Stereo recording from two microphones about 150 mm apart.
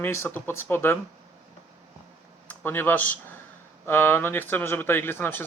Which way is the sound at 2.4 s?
15° left (ahead or behind).